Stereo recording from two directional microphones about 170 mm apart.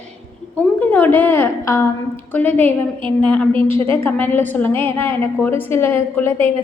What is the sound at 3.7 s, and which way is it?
Speech, 30° right (ahead or behind).